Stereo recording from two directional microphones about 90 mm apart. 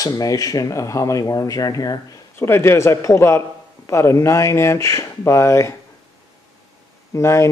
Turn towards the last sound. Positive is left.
turn(degrees=30)  # may be behind; listen again after turning